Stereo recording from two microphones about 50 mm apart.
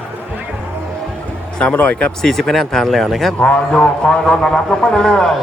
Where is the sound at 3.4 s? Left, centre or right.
Centre.